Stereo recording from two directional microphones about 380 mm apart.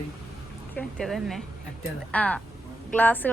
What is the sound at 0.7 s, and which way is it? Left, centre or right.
Speech, centre.